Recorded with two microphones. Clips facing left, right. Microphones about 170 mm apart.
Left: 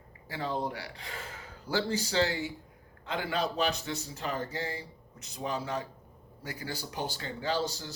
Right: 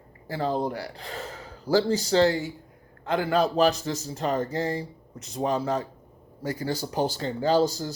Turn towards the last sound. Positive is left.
turn(degrees=-40)  # may be behind; listen again after turning